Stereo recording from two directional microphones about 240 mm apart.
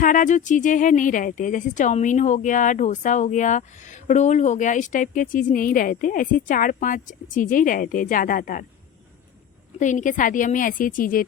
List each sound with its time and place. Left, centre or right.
0.0 s speech: left
9.7 s speech: left